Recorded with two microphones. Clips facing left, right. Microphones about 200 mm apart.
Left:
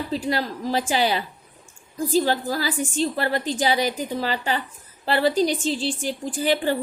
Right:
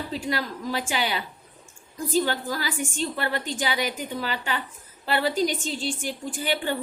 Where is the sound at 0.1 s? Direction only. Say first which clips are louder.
Left 5 dB; 35° left (ahead or behind).